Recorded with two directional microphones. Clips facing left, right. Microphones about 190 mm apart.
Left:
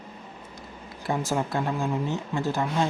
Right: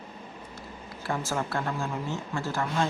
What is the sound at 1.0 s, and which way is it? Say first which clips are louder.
A woman's voice: left 4 dB; 20° left (ahead or behind).